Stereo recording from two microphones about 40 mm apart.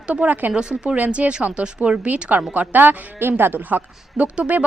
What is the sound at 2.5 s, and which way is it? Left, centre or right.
Speech, right.